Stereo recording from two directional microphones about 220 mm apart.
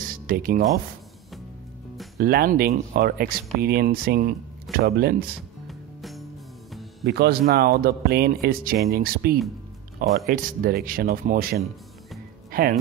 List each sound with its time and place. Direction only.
0.0 s music: 40° right (ahead or behind)
2.1 s speech: 40° right (ahead or behind)
5.7 s music: centre (ahead or behind)
7.1 s speech: 45° right (ahead or behind)
12.4 s music: 40° right (ahead or behind)